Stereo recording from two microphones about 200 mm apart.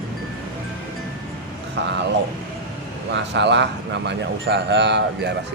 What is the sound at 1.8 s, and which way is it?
Speech, 60° right (ahead or behind).